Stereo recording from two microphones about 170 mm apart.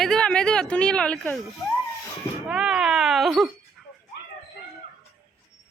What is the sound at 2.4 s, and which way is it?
Speech, 5° right (ahead or behind).